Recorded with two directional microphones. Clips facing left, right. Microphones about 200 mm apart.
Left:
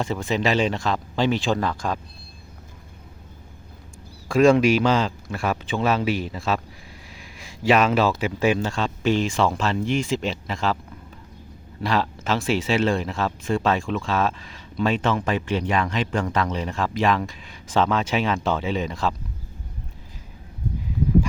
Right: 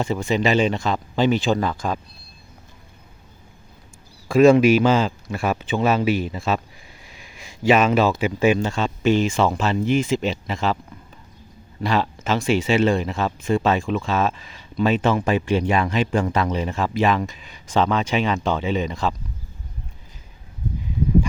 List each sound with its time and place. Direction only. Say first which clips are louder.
0.0 s speech: right 2 dB; centre (ahead or behind)
4.3 s speech: right 3 dB; 5° right (ahead or behind)
11.8 s speech: right 2 dB; centre (ahead or behind)